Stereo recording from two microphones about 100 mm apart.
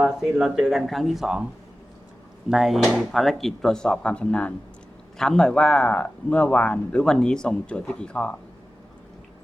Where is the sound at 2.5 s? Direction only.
Centre (ahead or behind).